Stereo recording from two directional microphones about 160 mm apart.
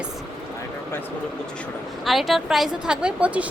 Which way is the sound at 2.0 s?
Centre (ahead or behind).